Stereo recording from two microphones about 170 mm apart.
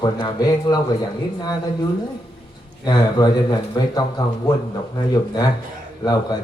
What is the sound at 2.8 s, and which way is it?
A man's voice, 25° left (ahead or behind).